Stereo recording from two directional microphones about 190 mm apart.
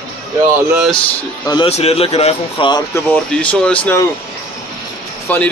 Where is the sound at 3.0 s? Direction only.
10° left (ahead or behind).